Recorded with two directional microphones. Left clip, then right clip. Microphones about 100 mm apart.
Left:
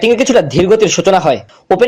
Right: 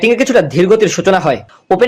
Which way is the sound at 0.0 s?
20° left (ahead or behind).